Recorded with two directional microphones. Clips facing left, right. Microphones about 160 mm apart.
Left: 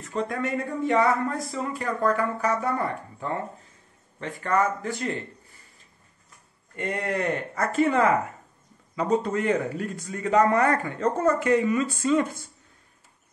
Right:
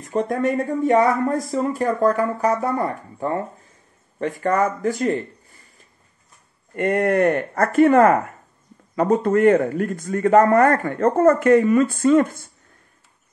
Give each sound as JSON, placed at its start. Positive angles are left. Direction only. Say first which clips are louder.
{"t": 0.1, "sound": "speech", "louder": "right 7 dB", "side_deg": -45}
{"t": 6.7, "sound": "speech", "louder": "right 10 dB", "side_deg": -55}